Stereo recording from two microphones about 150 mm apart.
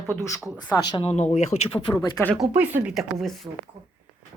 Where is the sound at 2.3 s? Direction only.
10° right (ahead or behind).